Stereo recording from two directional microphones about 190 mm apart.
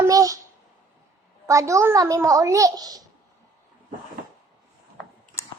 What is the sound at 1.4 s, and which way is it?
A child's voice, 15° right (ahead or behind).